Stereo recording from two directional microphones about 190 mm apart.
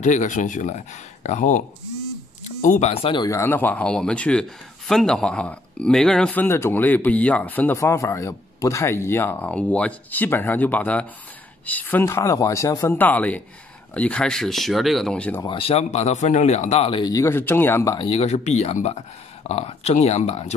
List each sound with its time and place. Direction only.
0.0 s speech: 40° left (ahead or behind)
2.6 s speech: 40° left (ahead or behind); by 15.4 s 5° left (ahead or behind)
15.4 s speech: 30° left (ahead or behind)